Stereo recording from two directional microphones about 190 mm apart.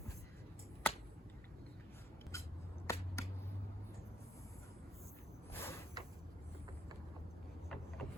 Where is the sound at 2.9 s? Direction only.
15° left (ahead or behind).